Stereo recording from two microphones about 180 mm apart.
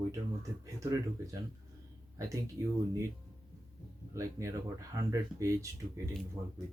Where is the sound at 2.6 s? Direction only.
20° right (ahead or behind).